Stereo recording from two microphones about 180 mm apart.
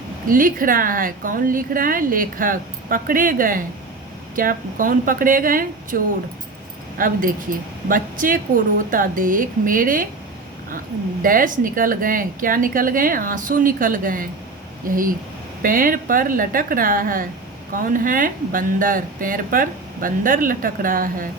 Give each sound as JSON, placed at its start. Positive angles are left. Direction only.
{"t": 0.3, "sound": "speech", "side_deg": -50}
{"t": 7.0, "sound": "speech", "side_deg": -50}
{"t": 11.2, "sound": "speech", "side_deg": -50}